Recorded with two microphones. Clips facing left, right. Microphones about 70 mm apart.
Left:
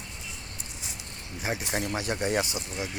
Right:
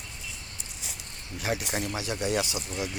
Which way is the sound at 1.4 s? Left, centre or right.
Left.